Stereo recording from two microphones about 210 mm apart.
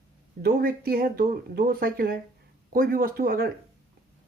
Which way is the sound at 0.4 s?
45° right (ahead or behind).